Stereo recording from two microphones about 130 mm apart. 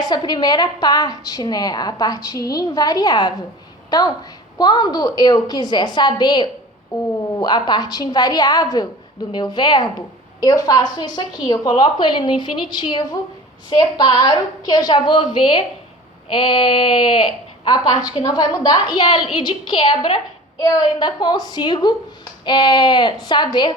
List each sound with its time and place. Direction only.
0.0 s speech: 35° left (ahead or behind)